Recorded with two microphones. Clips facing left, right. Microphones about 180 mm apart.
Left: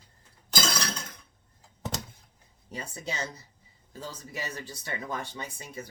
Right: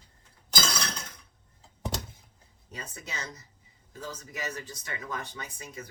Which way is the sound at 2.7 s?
30° left (ahead or behind).